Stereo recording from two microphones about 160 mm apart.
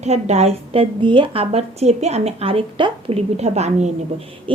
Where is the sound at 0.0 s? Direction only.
45° right (ahead or behind).